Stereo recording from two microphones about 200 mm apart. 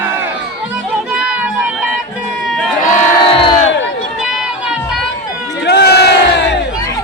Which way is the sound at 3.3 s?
25° left (ahead or behind).